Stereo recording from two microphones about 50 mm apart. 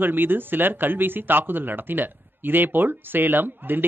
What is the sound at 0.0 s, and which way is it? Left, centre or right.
Speech, right.